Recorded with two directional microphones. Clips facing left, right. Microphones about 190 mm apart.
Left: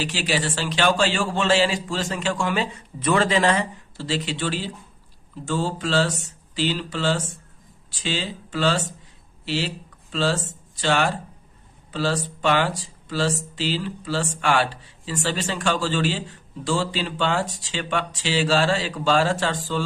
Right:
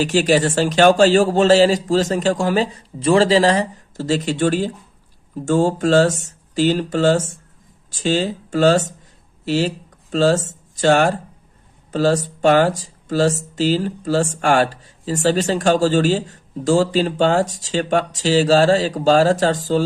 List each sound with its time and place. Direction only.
0.0 s speech: 45° right (ahead or behind)